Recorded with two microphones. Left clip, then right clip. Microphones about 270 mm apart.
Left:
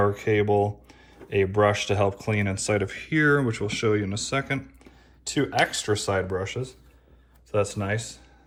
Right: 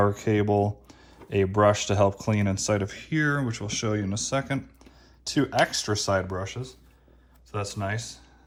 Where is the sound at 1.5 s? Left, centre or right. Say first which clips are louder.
Right 2 dB; centre.